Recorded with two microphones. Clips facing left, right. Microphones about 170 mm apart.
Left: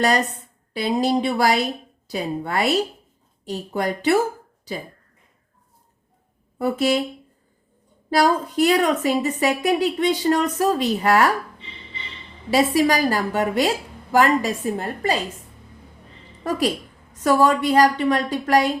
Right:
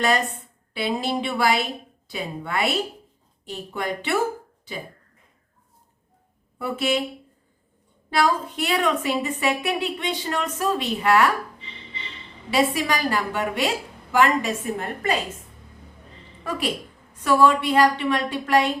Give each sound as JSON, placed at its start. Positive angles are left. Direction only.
{"t": 0.0, "sound": "a woman's voice", "side_deg": 40}
{"t": 6.6, "sound": "a woman's voice", "side_deg": 40}
{"t": 8.1, "sound": "a woman's voice", "side_deg": 40}
{"t": 12.5, "sound": "a woman's voice", "side_deg": 40}
{"t": 16.4, "sound": "a woman's voice", "side_deg": 40}